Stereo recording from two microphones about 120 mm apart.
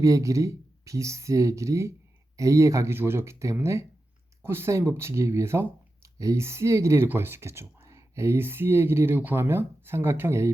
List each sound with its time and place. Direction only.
0.0 s speech: 25° right (ahead or behind)